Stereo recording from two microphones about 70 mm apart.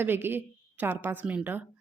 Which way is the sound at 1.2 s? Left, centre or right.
Centre.